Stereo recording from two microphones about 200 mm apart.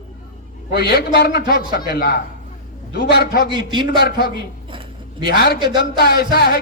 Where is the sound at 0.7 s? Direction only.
50° left (ahead or behind).